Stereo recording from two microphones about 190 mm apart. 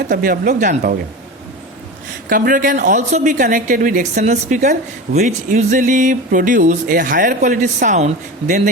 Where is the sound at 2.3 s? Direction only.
45° right (ahead or behind).